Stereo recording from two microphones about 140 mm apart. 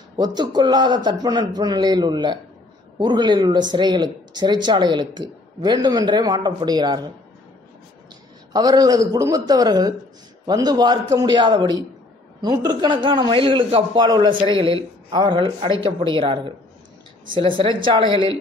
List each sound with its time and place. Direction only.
0.2 s a man's voice: 30° right (ahead or behind)
8.5 s a man's voice: 30° right (ahead or behind)